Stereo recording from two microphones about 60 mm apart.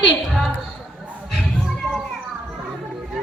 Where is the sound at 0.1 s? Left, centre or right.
Centre.